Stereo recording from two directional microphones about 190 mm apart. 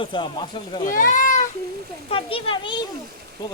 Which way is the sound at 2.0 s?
30° left (ahead or behind).